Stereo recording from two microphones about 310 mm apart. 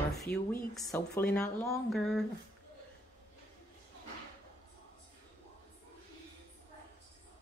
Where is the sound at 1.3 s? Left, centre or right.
Centre.